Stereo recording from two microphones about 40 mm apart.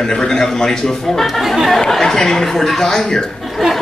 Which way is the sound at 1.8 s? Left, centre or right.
Centre.